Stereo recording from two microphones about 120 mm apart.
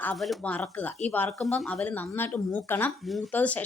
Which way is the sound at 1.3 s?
5° left (ahead or behind).